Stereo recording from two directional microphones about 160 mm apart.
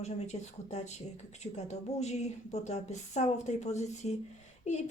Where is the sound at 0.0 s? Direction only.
45° left (ahead or behind).